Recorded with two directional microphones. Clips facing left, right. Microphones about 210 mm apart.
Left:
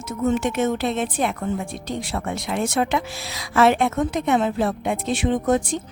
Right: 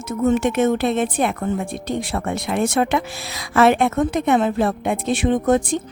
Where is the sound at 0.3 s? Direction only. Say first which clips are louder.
Right 4 dB; 55° right (ahead or behind).